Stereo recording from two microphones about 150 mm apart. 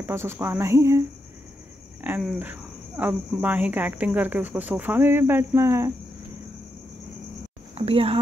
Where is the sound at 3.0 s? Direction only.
10° right (ahead or behind).